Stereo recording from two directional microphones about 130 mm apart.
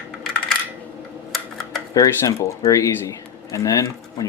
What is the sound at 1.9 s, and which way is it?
Speech, 25° left (ahead or behind).